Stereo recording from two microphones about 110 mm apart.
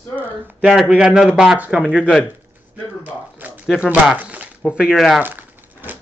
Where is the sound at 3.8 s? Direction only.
15° right (ahead or behind).